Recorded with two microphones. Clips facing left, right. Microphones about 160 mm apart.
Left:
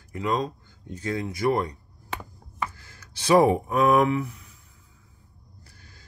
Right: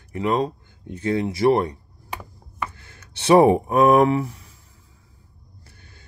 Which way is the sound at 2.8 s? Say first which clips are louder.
Right 2 dB; 60° right (ahead or behind).